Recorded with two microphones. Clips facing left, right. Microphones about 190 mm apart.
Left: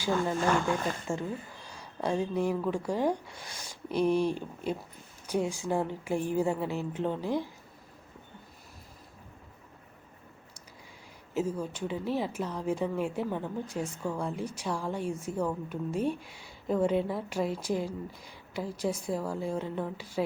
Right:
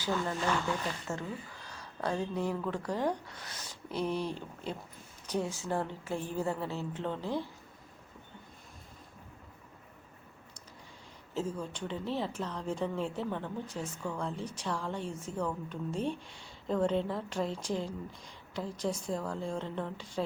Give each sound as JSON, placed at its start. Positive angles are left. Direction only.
{"t": 0.3, "sound": "speech", "side_deg": 50}
{"t": 1.6, "sound": "a woman's voice", "side_deg": 10}
{"t": 11.3, "sound": "a woman's voice", "side_deg": 10}